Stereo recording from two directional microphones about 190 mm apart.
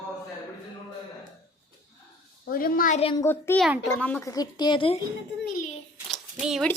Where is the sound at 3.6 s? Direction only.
Centre (ahead or behind); by 5.0 s 25° left (ahead or behind).